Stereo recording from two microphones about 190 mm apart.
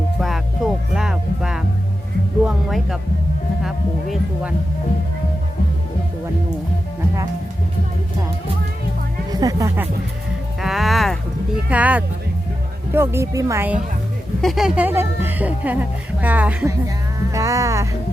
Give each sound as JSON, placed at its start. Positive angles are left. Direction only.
{"t": 0.2, "sound": "music", "side_deg": 0}
{"t": 3.6, "sound": "a sound", "side_deg": 0}
{"t": 9.3, "sound": "speech", "side_deg": -20}
{"t": 10.6, "sound": "music", "side_deg": 0}
{"t": 12.9, "sound": "speech", "side_deg": -10}
{"t": 14.4, "sound": "speech", "side_deg": 0}